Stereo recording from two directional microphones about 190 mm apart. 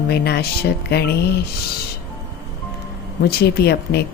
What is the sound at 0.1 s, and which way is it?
Speech, 60° left (ahead or behind).